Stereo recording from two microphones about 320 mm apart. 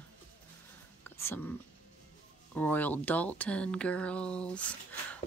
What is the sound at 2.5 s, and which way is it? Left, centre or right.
Speech, centre.